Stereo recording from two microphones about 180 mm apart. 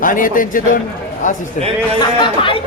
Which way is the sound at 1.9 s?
25° left (ahead or behind).